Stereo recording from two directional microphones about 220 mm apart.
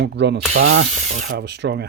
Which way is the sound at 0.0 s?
50° right (ahead or behind).